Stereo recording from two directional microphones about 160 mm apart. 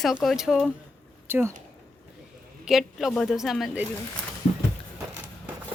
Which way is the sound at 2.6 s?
Centre (ahead or behind).